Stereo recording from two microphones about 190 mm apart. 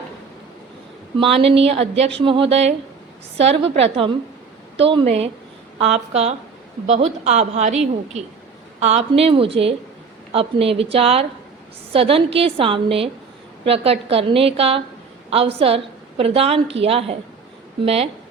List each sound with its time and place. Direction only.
1.2 s a woman's voice: 30° right (ahead or behind)